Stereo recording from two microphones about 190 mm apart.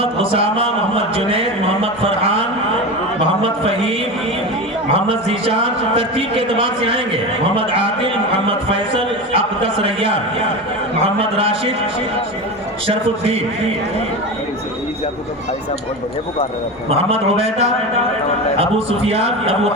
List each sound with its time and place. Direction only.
0.0 s a sound: 30° right (ahead or behind)
3.4 s mantra: 30° right (ahead or behind)
4.9 s a man's voice: 30° right (ahead or behind)
12.9 s a man's voice: 30° right (ahead or behind)
16.9 s a man's voice: 30° right (ahead or behind)